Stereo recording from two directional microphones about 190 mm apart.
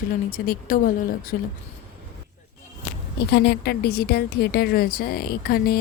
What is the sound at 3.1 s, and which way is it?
A woman's voice, 60° left (ahead or behind).